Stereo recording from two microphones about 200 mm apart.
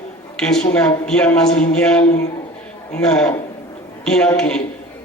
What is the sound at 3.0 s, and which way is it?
A man's voice, 5° left (ahead or behind).